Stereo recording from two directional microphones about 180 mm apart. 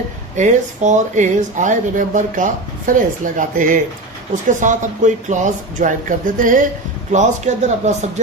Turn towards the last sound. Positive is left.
turn(degrees=-40)  # may be behind; listen again after turning